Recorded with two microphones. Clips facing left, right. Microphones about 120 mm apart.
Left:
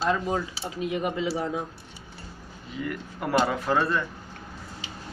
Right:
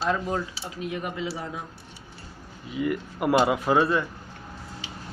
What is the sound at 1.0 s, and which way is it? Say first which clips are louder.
Speech: left 4 dB; 25° left (ahead or behind).